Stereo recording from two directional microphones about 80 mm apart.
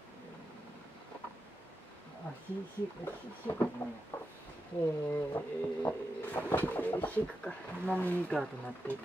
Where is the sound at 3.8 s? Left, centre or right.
Left.